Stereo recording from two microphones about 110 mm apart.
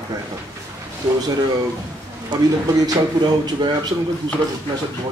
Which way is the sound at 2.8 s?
45° right (ahead or behind).